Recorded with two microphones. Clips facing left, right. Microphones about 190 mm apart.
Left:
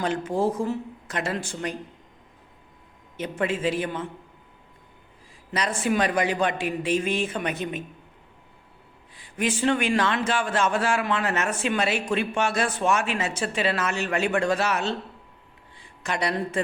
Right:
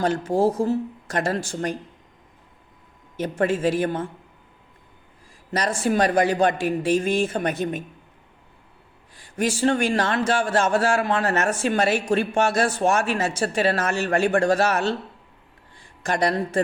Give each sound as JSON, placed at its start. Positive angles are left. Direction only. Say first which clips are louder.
{"t": 0.0, "sound": "speech", "louder": "right 4 dB", "side_deg": -40}
{"t": 3.2, "sound": "a man's voice", "louder": "right 4 dB", "side_deg": -45}
{"t": 5.5, "sound": "a man's voice", "louder": "right 2 dB", "side_deg": -40}
{"t": 9.1, "sound": "a man's voice", "louder": "right 2 dB", "side_deg": -45}
{"t": 15.8, "sound": "a sound", "louder": "right 5 dB", "side_deg": -45}